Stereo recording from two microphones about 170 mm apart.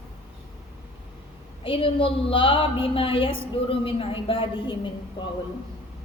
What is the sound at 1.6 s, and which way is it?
A woman's voice, 30° left (ahead or behind).